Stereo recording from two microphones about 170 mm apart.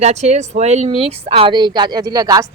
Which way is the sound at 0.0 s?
40° right (ahead or behind).